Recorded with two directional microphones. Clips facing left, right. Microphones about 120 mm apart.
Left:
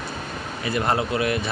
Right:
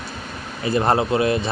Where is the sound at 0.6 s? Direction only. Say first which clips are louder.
Right 5 dB; 30° right (ahead or behind).